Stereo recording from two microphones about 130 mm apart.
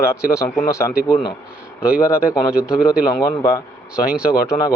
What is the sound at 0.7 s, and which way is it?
Speech, 20° left (ahead or behind).